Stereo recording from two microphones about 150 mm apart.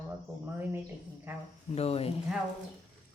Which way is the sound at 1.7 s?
45° left (ahead or behind).